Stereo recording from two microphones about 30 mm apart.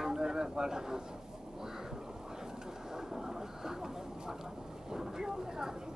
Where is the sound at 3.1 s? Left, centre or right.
Centre.